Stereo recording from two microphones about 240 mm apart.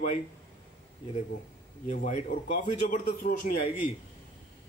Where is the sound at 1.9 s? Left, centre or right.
Left.